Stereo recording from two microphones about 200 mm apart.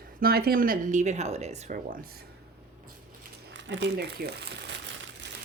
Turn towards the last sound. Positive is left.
turn(degrees=-55)  # may be behind; listen again after turning